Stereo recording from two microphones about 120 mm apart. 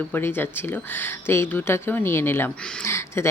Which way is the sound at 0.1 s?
20° left (ahead or behind).